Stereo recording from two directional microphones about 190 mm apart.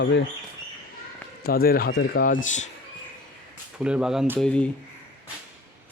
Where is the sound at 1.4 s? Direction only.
50° left (ahead or behind).